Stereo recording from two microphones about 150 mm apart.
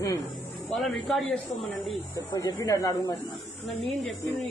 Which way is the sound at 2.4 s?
20° left (ahead or behind).